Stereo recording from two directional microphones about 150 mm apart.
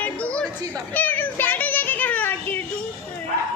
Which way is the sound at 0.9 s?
10° left (ahead or behind).